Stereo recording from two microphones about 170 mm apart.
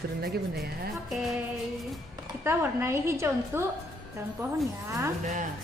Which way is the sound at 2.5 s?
15° right (ahead or behind).